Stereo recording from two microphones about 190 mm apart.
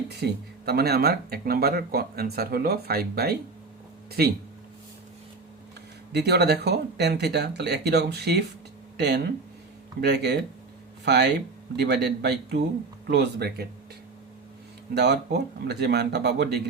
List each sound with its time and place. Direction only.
0.1 s speech: 60° right (ahead or behind)
6.1 s speech: 60° right (ahead or behind)
14.9 s speech: 60° right (ahead or behind)